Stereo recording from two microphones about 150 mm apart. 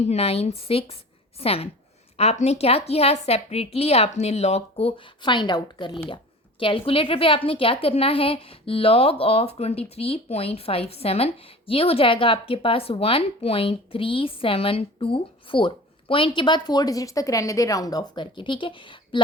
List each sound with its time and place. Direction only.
0.0 s a woman's voice: 45° left (ahead or behind)